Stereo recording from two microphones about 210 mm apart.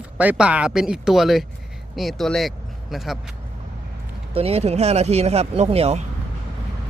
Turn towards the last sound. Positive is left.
turn(degrees=-30)  # may be behind; listen again after turning